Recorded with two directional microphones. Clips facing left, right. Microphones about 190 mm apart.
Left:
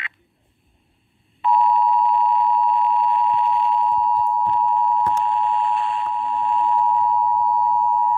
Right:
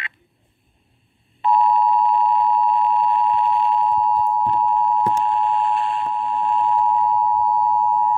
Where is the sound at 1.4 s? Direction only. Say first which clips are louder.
Right 1 dB; 35° right (ahead or behind).